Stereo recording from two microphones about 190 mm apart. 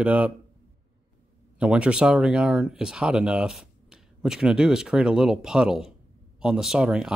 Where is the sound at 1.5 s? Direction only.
5° right (ahead or behind).